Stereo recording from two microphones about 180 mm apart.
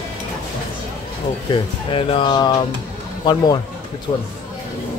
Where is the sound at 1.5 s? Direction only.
30° left (ahead or behind).